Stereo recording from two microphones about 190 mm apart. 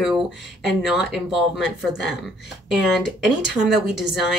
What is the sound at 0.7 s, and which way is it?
A woman's voice, centre (ahead or behind).